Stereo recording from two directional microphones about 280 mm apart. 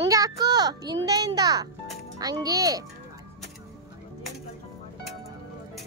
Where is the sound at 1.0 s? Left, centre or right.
Centre.